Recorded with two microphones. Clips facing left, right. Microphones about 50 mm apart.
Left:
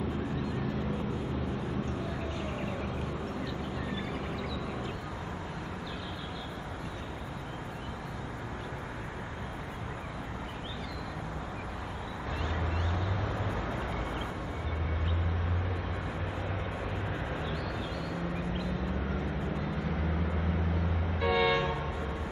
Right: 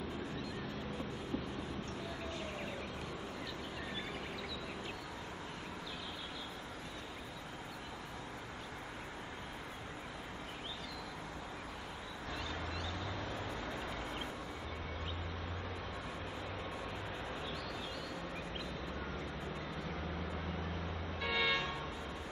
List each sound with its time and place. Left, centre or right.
21.2 s vehicle: centre